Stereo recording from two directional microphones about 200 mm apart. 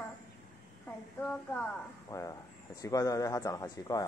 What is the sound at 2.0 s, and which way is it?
Speech, 15° left (ahead or behind).